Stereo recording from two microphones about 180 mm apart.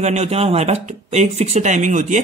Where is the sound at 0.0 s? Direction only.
35° right (ahead or behind).